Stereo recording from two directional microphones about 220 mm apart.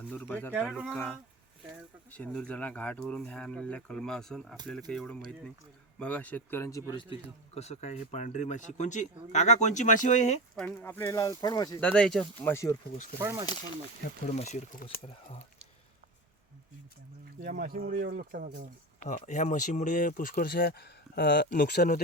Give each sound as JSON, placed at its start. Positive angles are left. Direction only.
{"t": 0.1, "sound": "speech", "side_deg": 5}
{"t": 0.5, "sound": "speech", "side_deg": -5}
{"t": 2.0, "sound": "a man's voice", "side_deg": 5}
{"t": 10.5, "sound": "speech", "side_deg": 5}
{"t": 11.8, "sound": "speech", "side_deg": 5}
{"t": 13.1, "sound": "speech", "side_deg": -10}
{"t": 14.3, "sound": "speech", "side_deg": 30}
{"t": 17.4, "sound": "speech", "side_deg": -40}
{"t": 18.9, "sound": "speech", "side_deg": 35}